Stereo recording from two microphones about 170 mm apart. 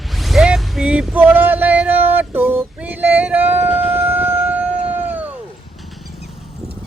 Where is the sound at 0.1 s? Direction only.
Centre (ahead or behind).